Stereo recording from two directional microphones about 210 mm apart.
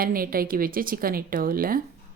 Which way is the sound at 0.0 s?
45° right (ahead or behind).